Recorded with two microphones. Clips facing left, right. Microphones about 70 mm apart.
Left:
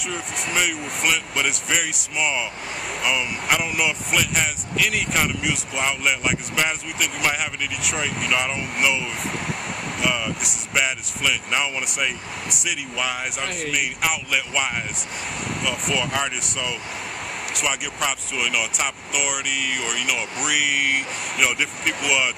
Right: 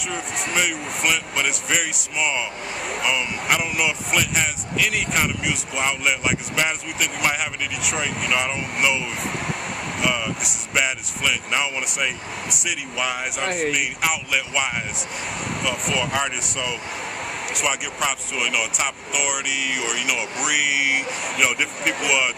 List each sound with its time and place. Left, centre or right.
0.1 s speech: centre
10.0 s speech: centre
13.5 s speech: right
13.7 s speech: centre